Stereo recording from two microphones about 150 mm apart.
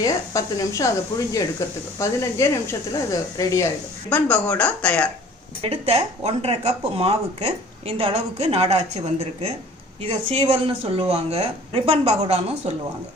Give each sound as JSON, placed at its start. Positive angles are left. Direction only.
{"t": 0.0, "sound": "speech", "side_deg": 20}
{"t": 2.0, "sound": "speech", "side_deg": 20}
{"t": 4.1, "sound": "speech", "side_deg": 10}
{"t": 5.6, "sound": "speech", "side_deg": -40}